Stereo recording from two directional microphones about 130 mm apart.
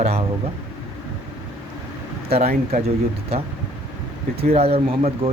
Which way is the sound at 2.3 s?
55° right (ahead or behind).